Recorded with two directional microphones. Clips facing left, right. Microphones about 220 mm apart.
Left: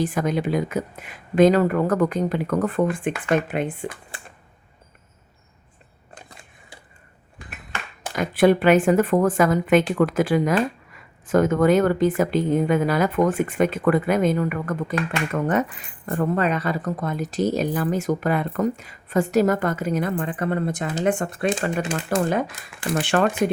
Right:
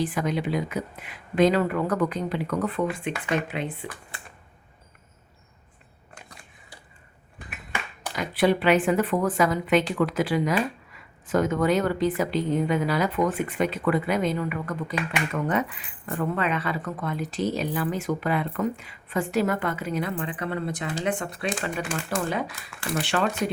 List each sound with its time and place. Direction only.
0.0 s a woman's voice: 45° left (ahead or behind)
8.0 s a woman's voice: 50° left (ahead or behind)